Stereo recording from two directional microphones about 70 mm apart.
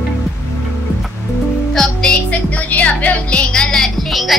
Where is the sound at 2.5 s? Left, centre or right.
Left; by 4.4 s centre.